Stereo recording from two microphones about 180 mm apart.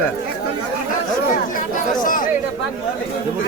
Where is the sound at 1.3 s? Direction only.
50° left (ahead or behind).